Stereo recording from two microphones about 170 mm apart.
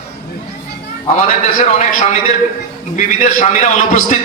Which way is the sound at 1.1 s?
50° left (ahead or behind).